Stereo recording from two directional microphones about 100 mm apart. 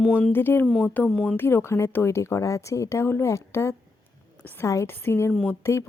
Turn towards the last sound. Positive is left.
turn(degrees=25)  # may be behind; listen again after turning